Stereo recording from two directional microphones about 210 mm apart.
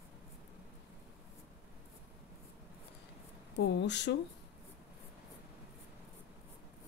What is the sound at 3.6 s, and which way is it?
Speech, 55° left (ahead or behind).